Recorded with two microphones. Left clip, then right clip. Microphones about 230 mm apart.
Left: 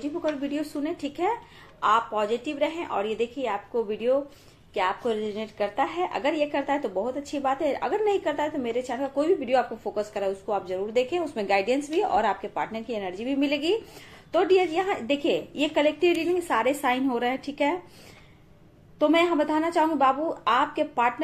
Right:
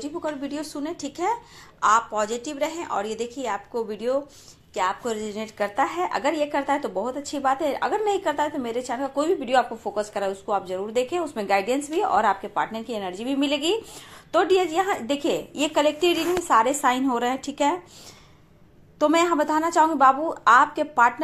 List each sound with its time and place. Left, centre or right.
0.0 s a woman's voice: centre
18.9 s a woman's voice: right